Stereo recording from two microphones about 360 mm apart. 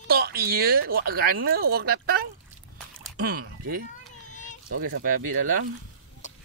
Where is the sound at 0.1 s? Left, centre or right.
Right.